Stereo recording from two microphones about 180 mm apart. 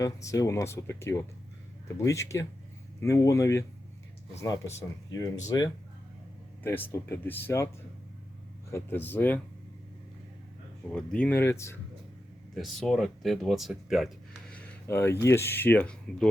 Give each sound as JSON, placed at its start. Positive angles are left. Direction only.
{"t": 0.0, "sound": "speech", "side_deg": 20}
{"t": 8.7, "sound": "speech", "side_deg": 10}
{"t": 10.9, "sound": "speech", "side_deg": 5}
{"t": 12.5, "sound": "speech", "side_deg": 0}